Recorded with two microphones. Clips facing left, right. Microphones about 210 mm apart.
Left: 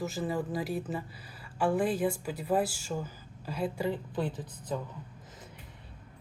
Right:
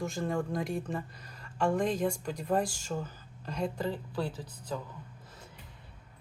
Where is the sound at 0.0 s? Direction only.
5° left (ahead or behind); by 4.8 s 20° left (ahead or behind).